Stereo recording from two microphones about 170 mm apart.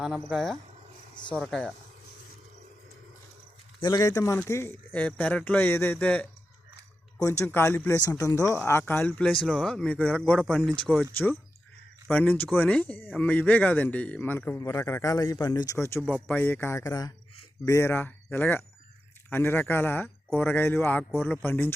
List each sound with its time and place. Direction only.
0.0 s speech: centre (ahead or behind)
3.8 s speech: 25° left (ahead or behind); by 11.0 s 5° left (ahead or behind)
12.0 s speech: 10° left (ahead or behind)